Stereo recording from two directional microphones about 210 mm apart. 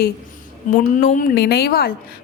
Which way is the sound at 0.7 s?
40° left (ahead or behind).